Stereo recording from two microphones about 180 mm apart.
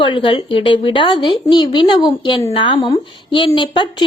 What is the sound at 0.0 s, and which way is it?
A woman's voice, 30° left (ahead or behind).